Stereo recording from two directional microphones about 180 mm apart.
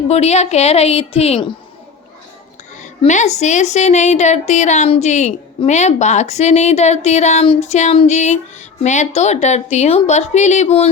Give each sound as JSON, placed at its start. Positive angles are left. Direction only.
{"t": 0.1, "sound": "a woman's voice", "side_deg": 35}
{"t": 2.7, "sound": "a woman's voice", "side_deg": 40}